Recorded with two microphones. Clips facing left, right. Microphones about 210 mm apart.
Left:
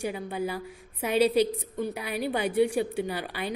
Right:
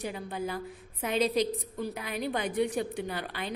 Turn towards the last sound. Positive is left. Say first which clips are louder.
# left 3 dB
turn(degrees=10)  # may be behind; listen again after turning